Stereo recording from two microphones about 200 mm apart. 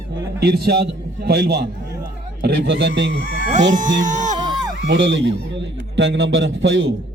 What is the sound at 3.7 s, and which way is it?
Speech, 40° right (ahead or behind).